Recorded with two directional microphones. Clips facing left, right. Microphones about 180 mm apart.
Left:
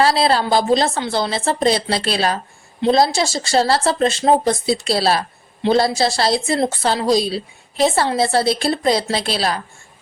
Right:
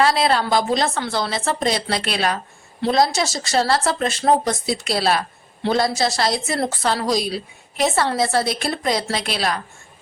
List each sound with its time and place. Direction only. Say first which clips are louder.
0.0 s speech: left 2 dB; 30° left (ahead or behind)